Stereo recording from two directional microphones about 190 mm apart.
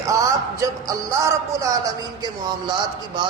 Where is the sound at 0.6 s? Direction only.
15° right (ahead or behind).